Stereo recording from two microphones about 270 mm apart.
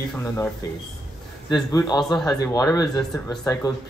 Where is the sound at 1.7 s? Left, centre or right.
Centre.